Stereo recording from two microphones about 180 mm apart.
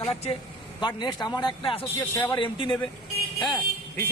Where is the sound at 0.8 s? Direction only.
25° left (ahead or behind).